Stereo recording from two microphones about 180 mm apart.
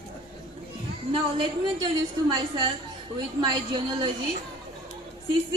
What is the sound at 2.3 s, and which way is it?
A woman's voice, 25° right (ahead or behind).